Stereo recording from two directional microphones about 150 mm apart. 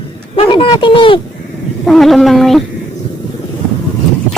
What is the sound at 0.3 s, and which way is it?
Speech, 35° left (ahead or behind).